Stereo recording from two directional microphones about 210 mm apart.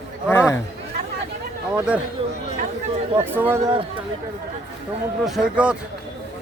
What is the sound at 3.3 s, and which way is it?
Speech, 10° right (ahead or behind).